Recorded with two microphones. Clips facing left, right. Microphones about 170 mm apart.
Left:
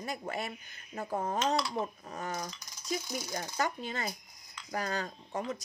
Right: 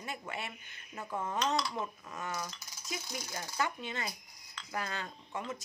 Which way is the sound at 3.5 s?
40° left (ahead or behind).